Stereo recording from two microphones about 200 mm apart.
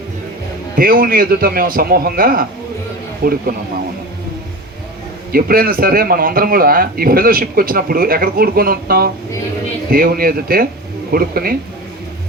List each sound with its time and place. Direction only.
0.8 s a man's voice: 45° right (ahead or behind)
5.3 s a man's voice: 50° right (ahead or behind)